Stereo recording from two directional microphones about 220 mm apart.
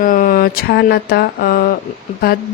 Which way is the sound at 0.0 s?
40° left (ahead or behind).